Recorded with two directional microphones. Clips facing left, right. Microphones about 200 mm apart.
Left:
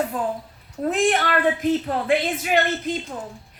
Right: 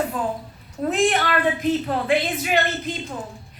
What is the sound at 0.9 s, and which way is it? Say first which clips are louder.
A woman's voice: even; 50° left (ahead or behind).